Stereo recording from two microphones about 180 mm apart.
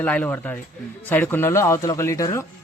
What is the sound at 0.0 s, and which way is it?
Speech, 10° left (ahead or behind).